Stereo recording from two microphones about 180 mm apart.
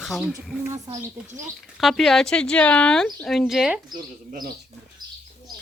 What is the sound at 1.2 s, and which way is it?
Speech, 45° right (ahead or behind).